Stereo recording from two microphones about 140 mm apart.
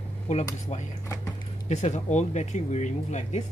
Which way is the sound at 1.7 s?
55° left (ahead or behind).